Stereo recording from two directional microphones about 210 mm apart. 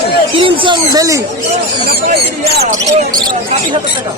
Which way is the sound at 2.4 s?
45° right (ahead or behind).